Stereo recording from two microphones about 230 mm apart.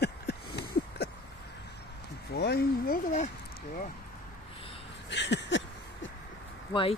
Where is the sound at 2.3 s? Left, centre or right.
Left.